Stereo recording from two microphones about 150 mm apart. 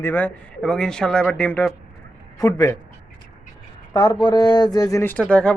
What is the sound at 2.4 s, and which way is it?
Speech, 20° left (ahead or behind).